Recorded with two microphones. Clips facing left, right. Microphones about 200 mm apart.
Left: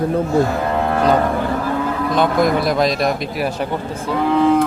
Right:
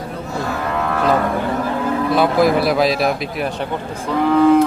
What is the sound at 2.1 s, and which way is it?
Speech, 5° right (ahead or behind).